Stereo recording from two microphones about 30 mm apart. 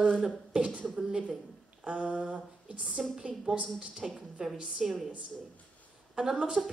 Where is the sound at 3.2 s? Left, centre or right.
Right.